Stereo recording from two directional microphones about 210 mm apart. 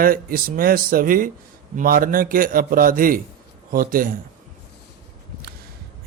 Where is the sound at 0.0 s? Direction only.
45° right (ahead or behind).